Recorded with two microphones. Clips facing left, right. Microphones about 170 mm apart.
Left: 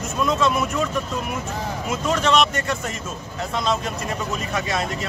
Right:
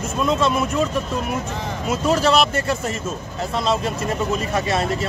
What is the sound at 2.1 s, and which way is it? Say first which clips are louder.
Speech: right 2 dB; 35° right (ahead or behind).